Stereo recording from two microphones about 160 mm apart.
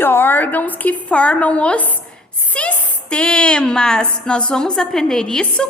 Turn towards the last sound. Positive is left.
turn(degrees=5)  # may be behind; listen again after turning